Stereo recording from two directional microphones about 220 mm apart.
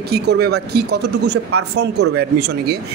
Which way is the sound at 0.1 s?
45° right (ahead or behind).